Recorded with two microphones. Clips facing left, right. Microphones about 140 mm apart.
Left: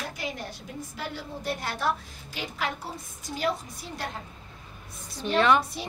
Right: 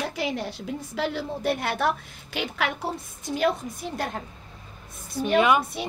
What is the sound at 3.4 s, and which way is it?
Speech, 50° right (ahead or behind).